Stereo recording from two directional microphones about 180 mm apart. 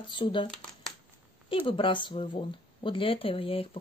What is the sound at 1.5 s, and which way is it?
Speech, 30° left (ahead or behind).